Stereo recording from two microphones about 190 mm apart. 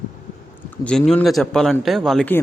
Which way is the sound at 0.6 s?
5° left (ahead or behind).